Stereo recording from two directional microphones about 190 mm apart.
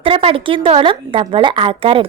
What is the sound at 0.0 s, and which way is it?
A woman's voice, 30° right (ahead or behind).